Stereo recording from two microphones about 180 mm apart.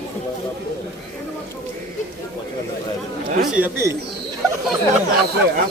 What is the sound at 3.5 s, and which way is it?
Speech, 10° right (ahead or behind).